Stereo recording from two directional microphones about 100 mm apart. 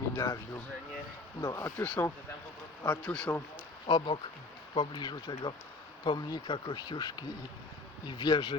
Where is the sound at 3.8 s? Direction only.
55° left (ahead or behind).